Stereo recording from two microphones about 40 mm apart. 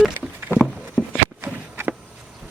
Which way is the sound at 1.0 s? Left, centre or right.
Centre.